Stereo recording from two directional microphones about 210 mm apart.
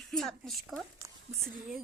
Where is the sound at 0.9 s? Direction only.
15° right (ahead or behind).